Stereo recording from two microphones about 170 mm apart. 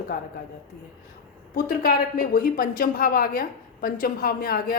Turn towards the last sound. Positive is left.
turn(degrees=60)  # may be behind; listen again after turning